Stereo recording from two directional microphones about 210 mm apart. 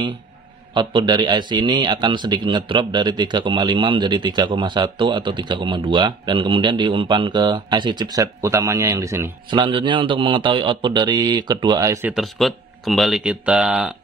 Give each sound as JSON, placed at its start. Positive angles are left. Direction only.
{"t": 0.7, "sound": "a man's voice", "side_deg": -20}
{"t": 12.1, "sound": "speech", "side_deg": 0}